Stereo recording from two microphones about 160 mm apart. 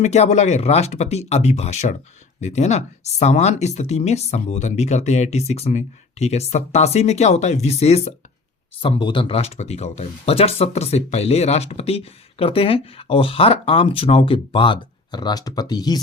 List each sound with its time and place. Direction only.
0.0 s speech: 45° left (ahead or behind)
8.8 s speech: 30° left (ahead or behind)